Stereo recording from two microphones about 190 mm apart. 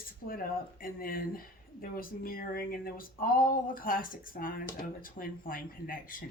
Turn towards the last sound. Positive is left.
turn(degrees=50)  # may be behind; listen again after turning